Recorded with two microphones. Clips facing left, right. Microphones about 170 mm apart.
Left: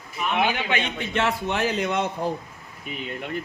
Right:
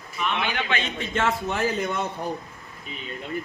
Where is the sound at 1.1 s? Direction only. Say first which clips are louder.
Even; 70° left (ahead or behind).